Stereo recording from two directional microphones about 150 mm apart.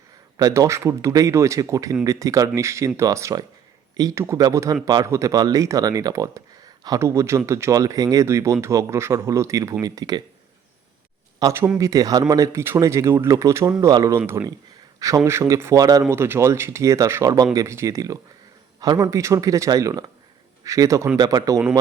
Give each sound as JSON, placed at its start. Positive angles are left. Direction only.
{"t": 0.3, "sound": "a man's voice", "side_deg": -25}
{"t": 11.3, "sound": "a man's voice", "side_deg": -20}